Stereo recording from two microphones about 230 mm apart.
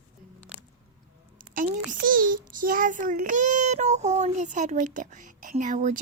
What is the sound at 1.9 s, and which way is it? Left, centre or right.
Child singing, right.